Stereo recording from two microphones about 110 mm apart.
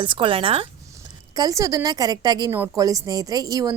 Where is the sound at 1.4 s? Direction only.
30° right (ahead or behind).